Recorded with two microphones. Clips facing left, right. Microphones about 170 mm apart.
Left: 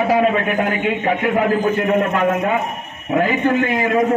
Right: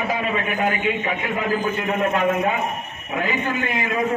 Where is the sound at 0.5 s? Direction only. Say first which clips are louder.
Left 3 dB; 50° left (ahead or behind).